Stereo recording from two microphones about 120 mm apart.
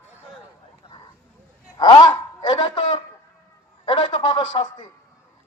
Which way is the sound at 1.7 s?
40° left (ahead or behind).